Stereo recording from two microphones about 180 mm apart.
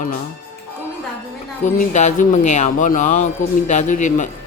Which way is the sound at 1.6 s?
40° left (ahead or behind).